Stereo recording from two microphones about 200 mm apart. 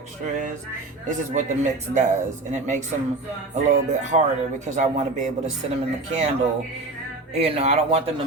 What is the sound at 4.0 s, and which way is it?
Speech, 35° right (ahead or behind).